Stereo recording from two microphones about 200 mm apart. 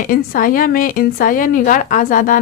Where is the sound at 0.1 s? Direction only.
45° left (ahead or behind).